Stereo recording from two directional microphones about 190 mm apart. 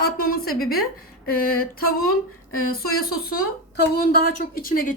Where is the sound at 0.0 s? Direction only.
50° left (ahead or behind).